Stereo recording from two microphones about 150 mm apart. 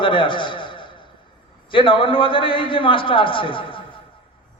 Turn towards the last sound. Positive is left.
turn(degrees=35)  # may be behind; listen again after turning